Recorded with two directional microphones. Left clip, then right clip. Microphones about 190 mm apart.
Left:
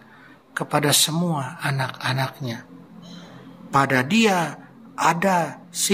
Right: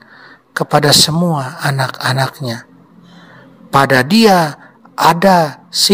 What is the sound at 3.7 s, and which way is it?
Speech, 50° right (ahead or behind).